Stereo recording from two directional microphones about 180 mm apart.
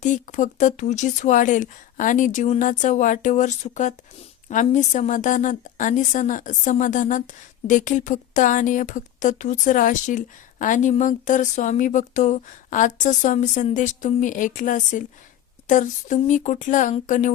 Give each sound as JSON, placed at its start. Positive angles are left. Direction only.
{"t": 0.0, "sound": "a woman's voice", "side_deg": 45}